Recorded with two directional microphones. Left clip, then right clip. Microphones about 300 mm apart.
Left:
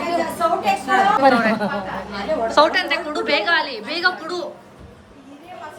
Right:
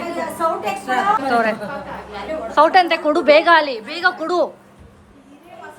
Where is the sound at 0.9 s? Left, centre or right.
Centre.